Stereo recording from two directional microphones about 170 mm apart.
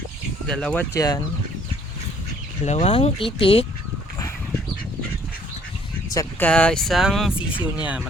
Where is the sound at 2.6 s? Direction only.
40° left (ahead or behind).